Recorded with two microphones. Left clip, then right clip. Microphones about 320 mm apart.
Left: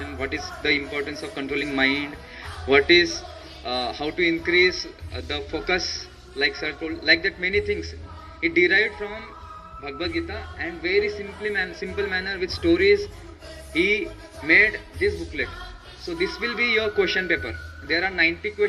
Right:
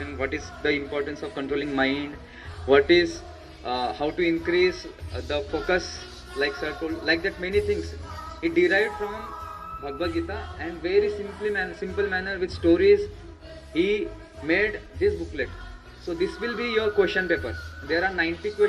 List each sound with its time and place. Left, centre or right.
0.3 s a man's voice: centre